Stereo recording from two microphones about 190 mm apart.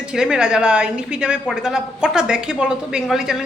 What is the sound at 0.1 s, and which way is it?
A woman's voice, 5° right (ahead or behind).